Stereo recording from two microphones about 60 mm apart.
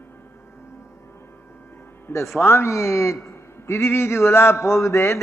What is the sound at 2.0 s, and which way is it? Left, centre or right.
A man's voice, left.